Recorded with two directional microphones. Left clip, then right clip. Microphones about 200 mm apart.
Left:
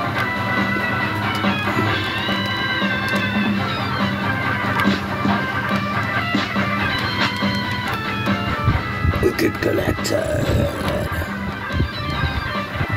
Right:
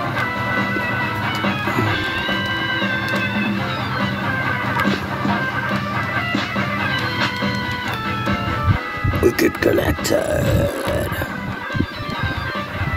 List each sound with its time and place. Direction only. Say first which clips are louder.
9.2 s music: right 3 dB; 50° right (ahead or behind)